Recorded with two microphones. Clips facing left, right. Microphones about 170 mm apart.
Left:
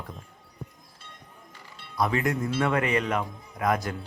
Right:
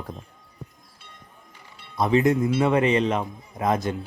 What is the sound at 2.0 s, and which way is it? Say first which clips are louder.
Speech: right 6 dB; 20° right (ahead or behind).